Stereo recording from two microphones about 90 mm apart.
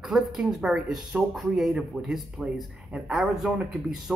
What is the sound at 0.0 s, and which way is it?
A man's voice, 5° right (ahead or behind).